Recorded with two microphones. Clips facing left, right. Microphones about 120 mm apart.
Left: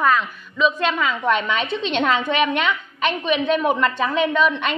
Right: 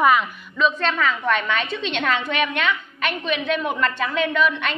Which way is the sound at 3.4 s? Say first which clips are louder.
Left 4 dB; 30° left (ahead or behind).